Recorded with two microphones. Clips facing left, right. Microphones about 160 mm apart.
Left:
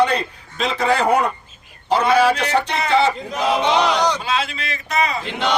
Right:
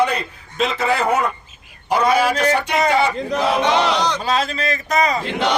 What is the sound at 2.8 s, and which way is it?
Speech, 45° right (ahead or behind).